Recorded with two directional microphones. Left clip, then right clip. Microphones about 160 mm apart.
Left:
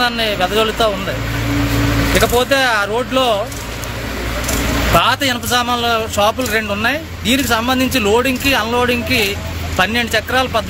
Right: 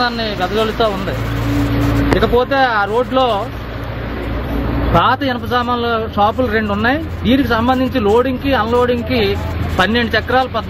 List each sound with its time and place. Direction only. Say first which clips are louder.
0.0 s a man's voice: left 2 dB; 10° left (ahead or behind)
2.1 s a man's voice: even; 15° left (ahead or behind)
4.9 s a man's voice: right 1 dB; 15° left (ahead or behind)